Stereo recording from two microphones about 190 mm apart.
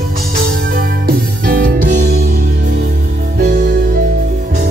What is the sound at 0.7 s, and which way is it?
Music, 50° right (ahead or behind).